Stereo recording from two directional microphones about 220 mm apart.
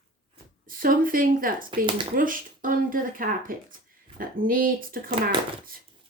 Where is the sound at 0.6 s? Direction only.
40° right (ahead or behind).